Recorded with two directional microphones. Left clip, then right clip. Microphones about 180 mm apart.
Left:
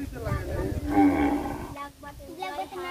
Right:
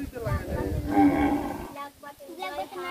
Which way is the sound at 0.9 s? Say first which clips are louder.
Even; 50° right (ahead or behind).